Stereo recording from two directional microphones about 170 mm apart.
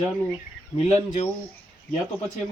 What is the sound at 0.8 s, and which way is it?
Speech, 45° left (ahead or behind).